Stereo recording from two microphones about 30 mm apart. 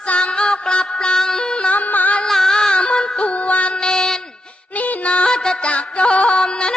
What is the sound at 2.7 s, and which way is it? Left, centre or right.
Music, left.